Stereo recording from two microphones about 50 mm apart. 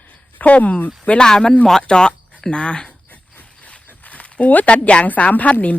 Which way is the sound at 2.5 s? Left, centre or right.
Left.